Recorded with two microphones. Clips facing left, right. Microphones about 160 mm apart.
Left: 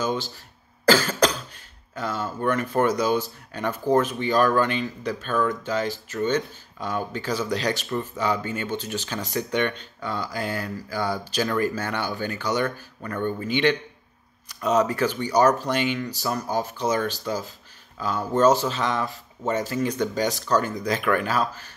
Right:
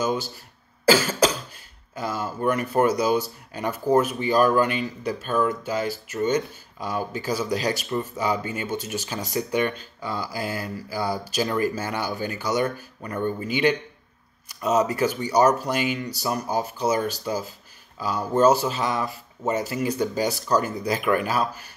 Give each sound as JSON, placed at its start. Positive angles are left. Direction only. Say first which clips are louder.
{"t": 0.8, "sound": "cough", "louder": "even", "side_deg": -5}
{"t": 2.0, "sound": "speech", "louder": "even", "side_deg": -10}